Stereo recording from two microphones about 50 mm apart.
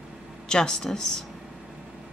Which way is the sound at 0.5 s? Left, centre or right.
Centre.